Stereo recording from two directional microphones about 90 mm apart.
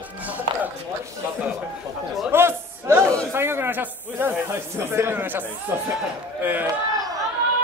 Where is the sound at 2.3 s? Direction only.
25° right (ahead or behind).